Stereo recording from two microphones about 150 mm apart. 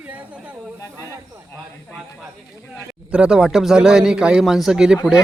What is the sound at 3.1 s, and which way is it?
A man's voice, 5° right (ahead or behind).